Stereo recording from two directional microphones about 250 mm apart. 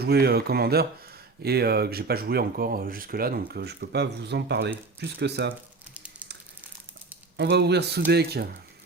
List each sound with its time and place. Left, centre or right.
0.0 s speech: right
5.9 s a sound: centre
7.3 s speech: right